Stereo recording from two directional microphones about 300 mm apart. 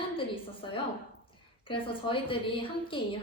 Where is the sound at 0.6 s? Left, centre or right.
Centre.